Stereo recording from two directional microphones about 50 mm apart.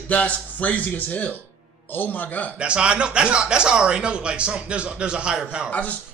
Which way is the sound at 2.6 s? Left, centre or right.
Right.